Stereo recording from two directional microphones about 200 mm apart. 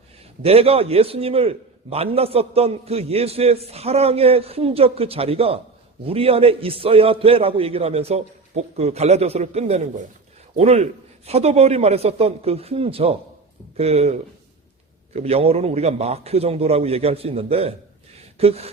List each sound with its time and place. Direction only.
0.4 s a man's voice: 30° right (ahead or behind)